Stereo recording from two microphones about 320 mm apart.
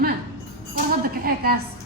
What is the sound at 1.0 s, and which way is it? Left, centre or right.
Speech, right.